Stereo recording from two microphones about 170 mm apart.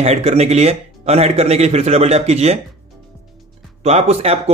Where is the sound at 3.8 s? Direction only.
40° right (ahead or behind).